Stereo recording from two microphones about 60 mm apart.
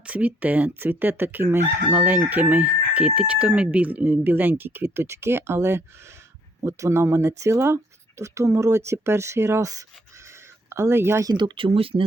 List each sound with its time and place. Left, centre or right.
0.0 s chicken: right
6.7 s speech: right
10.7 s speech: right